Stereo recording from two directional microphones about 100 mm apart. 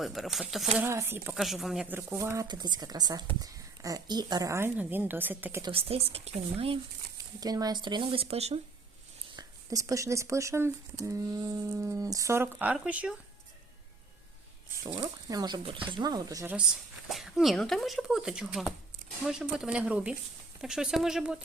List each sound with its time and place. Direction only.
0.0 s speech: centre (ahead or behind)
0.9 s speech: 25° right (ahead or behind)
1.4 s speech: centre (ahead or behind)
1.9 s speech: 20° right (ahead or behind)
2.5 s speech: 45° right (ahead or behind); by 4.7 s 30° right (ahead or behind)
4.8 s speech: 20° right (ahead or behind)
5.7 s speech: 80° right
7.3 s speech: 40° right (ahead or behind)
8.2 s speech: 90° right
9.3 s speech: 40° right (ahead or behind)
12.5 s speech: 10° right (ahead or behind)
15.3 s speech: 40° right (ahead or behind)
15.6 s speech: 60° right (ahead or behind); by 16.5 s 35° right (ahead or behind)
17.1 s speech: 5° right (ahead or behind)